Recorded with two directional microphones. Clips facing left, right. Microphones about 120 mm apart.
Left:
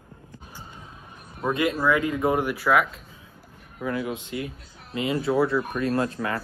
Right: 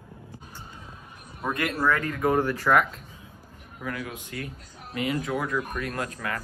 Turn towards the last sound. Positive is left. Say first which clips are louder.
# left 6 dB
turn(degrees=30)  # may be behind; listen again after turning